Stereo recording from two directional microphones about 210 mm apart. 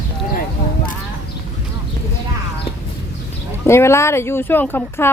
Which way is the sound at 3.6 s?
10° left (ahead or behind).